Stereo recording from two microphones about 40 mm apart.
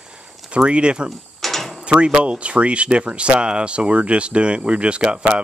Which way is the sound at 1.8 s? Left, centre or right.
Right.